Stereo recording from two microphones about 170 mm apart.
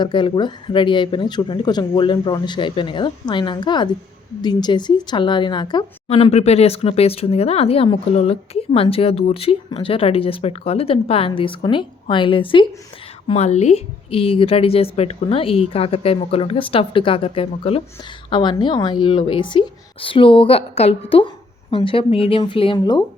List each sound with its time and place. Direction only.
0.0 s speech: 25° left (ahead or behind)
6.1 s speech: 35° left (ahead or behind)